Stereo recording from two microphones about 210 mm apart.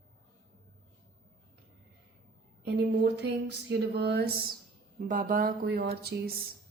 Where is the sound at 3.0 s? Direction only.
55° right (ahead or behind).